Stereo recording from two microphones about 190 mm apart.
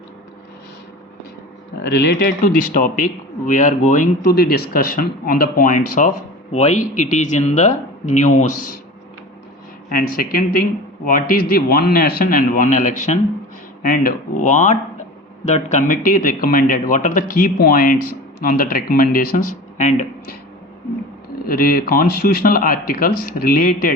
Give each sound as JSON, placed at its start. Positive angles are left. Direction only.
{"t": 1.8, "sound": "a man's voice", "side_deg": 60}
{"t": 9.9, "sound": "a man's voice", "side_deg": 50}
{"t": 19.7, "sound": "speech", "side_deg": 40}
{"t": 21.4, "sound": "a man's voice", "side_deg": 50}